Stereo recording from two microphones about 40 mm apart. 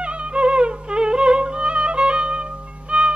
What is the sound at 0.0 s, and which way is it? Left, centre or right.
Music, right.